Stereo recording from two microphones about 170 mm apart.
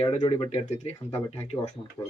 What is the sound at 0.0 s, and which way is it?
Speech, 35° left (ahead or behind).